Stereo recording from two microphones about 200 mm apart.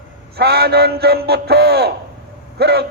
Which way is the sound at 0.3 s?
55° right (ahead or behind).